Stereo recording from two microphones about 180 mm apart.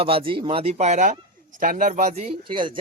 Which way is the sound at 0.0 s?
30° right (ahead or behind).